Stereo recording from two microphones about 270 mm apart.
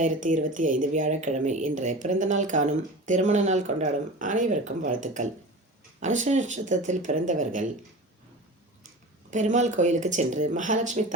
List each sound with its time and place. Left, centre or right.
0.0 s speech: right
9.3 s speech: right